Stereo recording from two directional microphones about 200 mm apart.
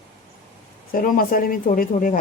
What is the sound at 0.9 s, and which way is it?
Speech, 45° left (ahead or behind).